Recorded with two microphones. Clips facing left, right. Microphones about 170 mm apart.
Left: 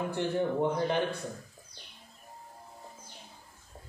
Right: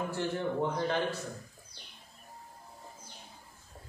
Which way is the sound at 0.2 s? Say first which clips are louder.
Left 4 dB; 20° left (ahead or behind).